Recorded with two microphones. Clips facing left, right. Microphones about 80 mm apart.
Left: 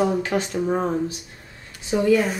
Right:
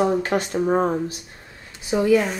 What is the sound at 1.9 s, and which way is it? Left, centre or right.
Speech, centre.